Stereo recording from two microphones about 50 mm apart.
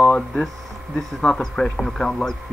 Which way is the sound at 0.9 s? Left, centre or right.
Centre.